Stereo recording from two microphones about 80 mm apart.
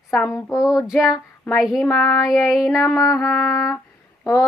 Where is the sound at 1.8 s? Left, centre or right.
Left.